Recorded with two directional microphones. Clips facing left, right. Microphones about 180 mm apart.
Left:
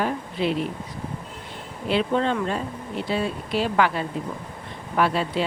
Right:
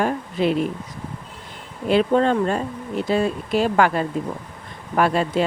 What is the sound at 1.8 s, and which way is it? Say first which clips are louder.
Speech: right 5 dB; 45° right (ahead or behind).